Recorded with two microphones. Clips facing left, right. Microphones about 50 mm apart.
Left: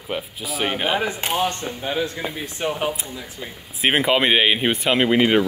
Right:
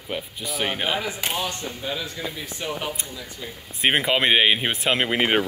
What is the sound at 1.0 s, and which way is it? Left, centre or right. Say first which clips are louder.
Speech: left 5 dB; left.